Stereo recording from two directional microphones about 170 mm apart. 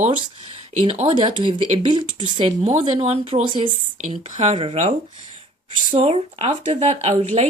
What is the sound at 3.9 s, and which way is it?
Speech, 45° right (ahead or behind).